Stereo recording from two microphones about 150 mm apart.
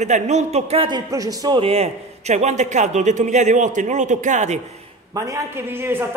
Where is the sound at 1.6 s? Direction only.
40° right (ahead or behind).